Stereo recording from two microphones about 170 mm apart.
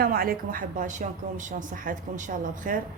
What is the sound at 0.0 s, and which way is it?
A woman's voice, 60° right (ahead or behind).